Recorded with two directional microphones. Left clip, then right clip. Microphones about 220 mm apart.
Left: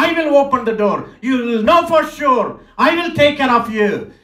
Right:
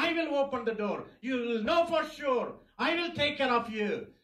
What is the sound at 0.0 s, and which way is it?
Speech, 35° left (ahead or behind).